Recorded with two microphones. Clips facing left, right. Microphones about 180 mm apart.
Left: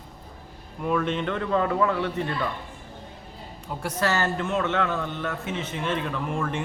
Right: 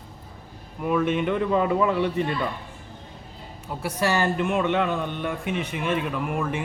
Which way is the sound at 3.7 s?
5° right (ahead or behind).